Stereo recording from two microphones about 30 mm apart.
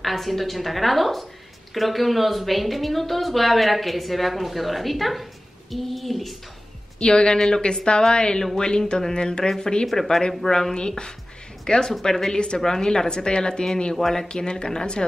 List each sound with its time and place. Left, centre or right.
0.0 s speech: centre
7.0 s a woman's voice: left
7.3 s a woman's voice: centre
7.6 s a woman's voice: left